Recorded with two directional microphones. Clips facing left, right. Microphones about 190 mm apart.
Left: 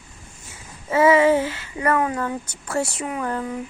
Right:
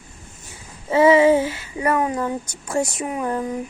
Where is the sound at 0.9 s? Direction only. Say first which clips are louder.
Right 2 dB; 15° right (ahead or behind).